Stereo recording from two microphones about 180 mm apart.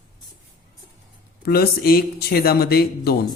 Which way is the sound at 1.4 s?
60° left (ahead or behind).